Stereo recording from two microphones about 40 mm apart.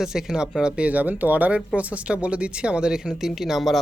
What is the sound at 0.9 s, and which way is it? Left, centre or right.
Speech, right.